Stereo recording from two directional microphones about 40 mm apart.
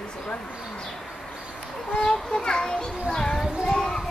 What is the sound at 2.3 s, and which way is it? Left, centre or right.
Children playing, centre.